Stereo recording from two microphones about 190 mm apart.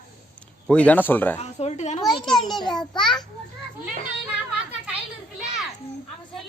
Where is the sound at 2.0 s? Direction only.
Centre (ahead or behind).